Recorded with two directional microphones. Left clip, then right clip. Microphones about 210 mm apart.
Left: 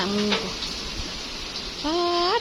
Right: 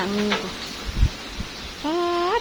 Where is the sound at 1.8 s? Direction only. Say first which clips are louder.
Even; 10° right (ahead or behind).